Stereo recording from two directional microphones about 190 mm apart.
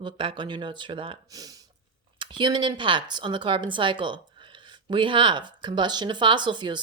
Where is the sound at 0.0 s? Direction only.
25° right (ahead or behind).